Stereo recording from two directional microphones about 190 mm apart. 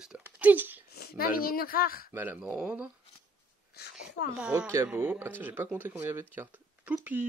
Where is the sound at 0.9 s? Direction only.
55° left (ahead or behind).